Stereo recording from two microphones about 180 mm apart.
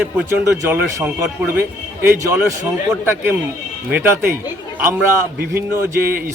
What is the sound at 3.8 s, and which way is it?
Speech, 10° right (ahead or behind).